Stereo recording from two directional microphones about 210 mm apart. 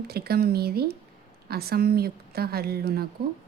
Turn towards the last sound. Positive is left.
turn(degrees=-45)  # may be behind; listen again after turning